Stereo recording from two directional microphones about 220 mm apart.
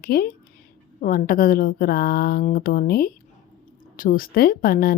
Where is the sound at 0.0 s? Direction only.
45° left (ahead or behind).